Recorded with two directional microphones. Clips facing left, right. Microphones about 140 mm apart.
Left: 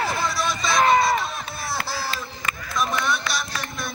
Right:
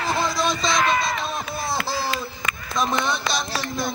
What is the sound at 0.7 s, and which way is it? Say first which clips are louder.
Music: left 9 dB; 30° left (ahead or behind).